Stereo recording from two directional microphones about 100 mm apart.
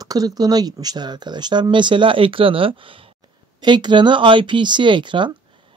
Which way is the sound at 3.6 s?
50° right (ahead or behind).